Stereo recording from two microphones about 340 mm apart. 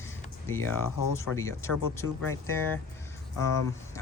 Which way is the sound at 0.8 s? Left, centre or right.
Left.